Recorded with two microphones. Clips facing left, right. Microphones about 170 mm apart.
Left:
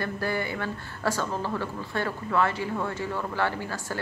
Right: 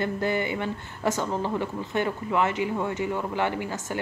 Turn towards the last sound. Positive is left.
turn(degrees=-20)  # may be behind; listen again after turning